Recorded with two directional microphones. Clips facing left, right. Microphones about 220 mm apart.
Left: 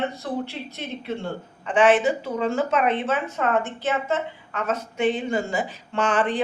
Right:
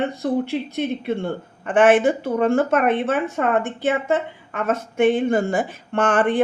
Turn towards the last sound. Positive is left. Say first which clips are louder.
# right 4 dB
turn(degrees=-55)  # may be behind; listen again after turning